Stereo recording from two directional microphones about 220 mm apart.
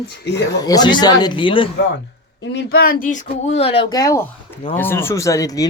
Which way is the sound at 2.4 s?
50° left (ahead or behind).